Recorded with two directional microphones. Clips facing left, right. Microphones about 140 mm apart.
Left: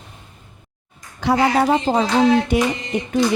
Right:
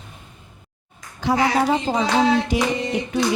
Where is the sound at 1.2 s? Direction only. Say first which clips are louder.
Left 2 dB; 70° left (ahead or behind).